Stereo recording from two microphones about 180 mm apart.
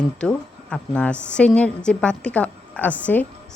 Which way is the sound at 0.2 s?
5° left (ahead or behind).